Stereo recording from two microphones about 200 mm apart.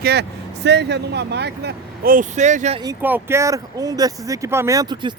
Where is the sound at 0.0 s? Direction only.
55° right (ahead or behind); by 2.8 s 35° right (ahead or behind).